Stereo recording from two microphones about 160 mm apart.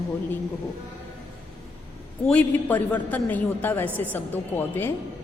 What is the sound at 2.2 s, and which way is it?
A woman's voice, 10° left (ahead or behind).